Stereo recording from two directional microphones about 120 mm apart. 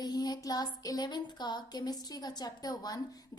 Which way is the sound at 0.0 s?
35° left (ahead or behind).